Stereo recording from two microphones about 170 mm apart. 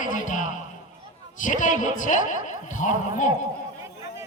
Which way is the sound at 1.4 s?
50° left (ahead or behind).